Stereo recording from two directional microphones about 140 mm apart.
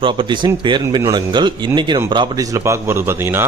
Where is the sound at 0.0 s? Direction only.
35° right (ahead or behind).